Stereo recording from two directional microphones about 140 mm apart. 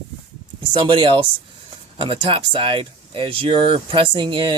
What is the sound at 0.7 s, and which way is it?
Speech, 35° right (ahead or behind).